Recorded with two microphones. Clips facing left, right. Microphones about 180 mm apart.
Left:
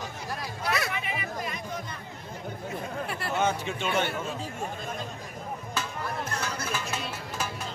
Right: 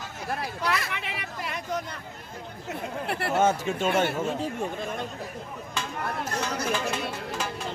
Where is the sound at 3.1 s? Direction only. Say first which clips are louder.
Right 4 dB; 65° right (ahead or behind).